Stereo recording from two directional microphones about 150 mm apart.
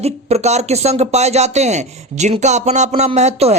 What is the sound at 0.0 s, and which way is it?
Speech, 45° right (ahead or behind).